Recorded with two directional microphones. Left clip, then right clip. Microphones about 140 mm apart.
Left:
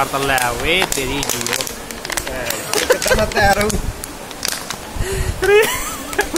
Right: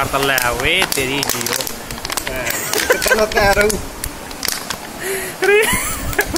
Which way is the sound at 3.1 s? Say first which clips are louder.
Right 3 dB; 5° right (ahead or behind).